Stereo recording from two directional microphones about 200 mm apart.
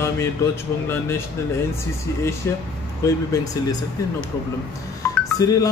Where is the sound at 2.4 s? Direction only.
15° left (ahead or behind).